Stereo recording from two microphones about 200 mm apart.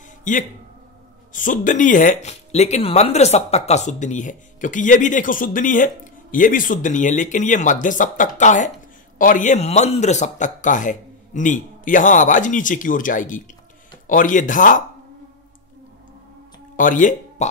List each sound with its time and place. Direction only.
0.2 s speech: 40° left (ahead or behind)
16.7 s speech: 40° left (ahead or behind)